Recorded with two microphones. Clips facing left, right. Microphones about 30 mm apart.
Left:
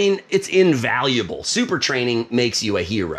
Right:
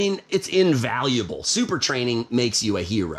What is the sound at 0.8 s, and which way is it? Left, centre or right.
Speech, left.